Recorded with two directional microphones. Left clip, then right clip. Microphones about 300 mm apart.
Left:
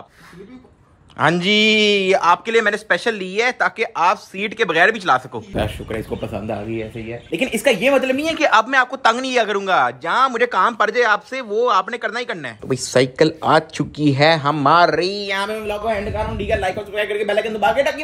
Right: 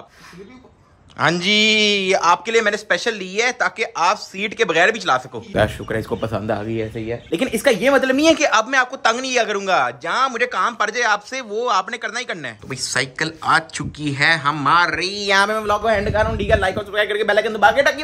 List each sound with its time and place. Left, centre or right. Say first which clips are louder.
1.1 s a man's voice: left 1 dB; centre
8.1 s a man's voice: right 5 dB; right
8.4 s a man's voice: left 2 dB; centre
15.2 s speech: right 6 dB; centre
15.5 s a man's voice: right 4 dB; centre
17.4 s a man's voice: right 3 dB; right